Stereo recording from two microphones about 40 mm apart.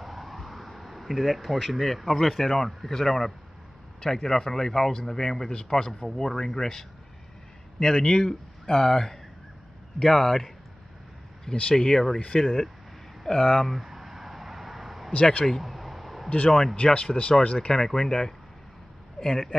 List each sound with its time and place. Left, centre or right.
0.0 s speech: centre
13.2 s speech: centre
13.7 s a sound: centre
16.4 s speech: centre
16.7 s speech: left